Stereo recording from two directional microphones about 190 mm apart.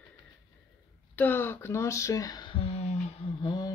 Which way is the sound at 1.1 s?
10° left (ahead or behind).